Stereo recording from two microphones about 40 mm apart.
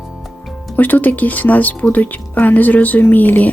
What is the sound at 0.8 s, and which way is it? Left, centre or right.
Speech, left.